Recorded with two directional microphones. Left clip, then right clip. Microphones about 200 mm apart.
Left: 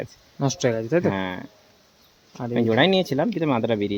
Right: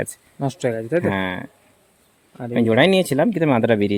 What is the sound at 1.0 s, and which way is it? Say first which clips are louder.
Speech: right 3 dB; 45° right (ahead or behind).